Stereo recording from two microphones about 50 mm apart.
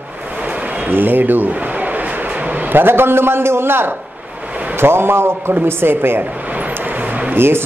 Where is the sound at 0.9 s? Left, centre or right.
Right.